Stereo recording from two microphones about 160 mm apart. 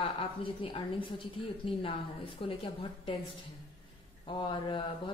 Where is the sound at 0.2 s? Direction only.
35° left (ahead or behind).